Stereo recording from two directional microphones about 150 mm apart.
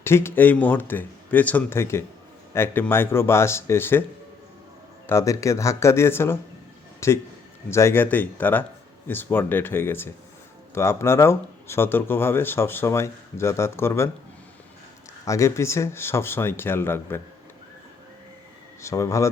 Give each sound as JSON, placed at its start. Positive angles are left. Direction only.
{"t": 0.0, "sound": "speech", "side_deg": 15}
{"t": 5.0, "sound": "speech", "side_deg": 20}
{"t": 15.2, "sound": "speech", "side_deg": 20}
{"t": 18.8, "sound": "speech", "side_deg": 20}